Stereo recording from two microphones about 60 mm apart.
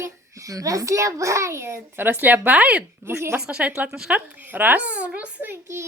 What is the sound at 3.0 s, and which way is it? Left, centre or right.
Speech, right.